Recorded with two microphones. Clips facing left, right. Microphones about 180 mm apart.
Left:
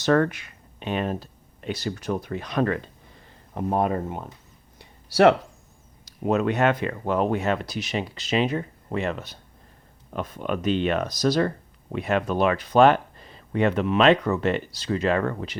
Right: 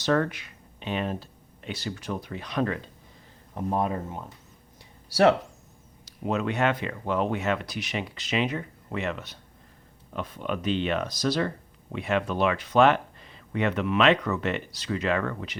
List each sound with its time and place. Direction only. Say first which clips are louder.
0.0 s speech: left 4 dB; 50° left (ahead or behind)
3.5 s speech: left 4 dB; 65° left (ahead or behind)
4.8 s a sound: left 4 dB; 65° left (ahead or behind)
6.2 s speech: left 4 dB; 45° left (ahead or behind)